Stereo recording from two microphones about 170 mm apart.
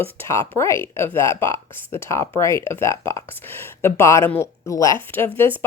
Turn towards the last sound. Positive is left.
turn(degrees=10)  # may be behind; listen again after turning